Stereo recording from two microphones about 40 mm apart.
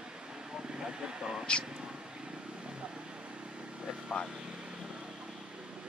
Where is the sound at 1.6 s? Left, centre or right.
Right.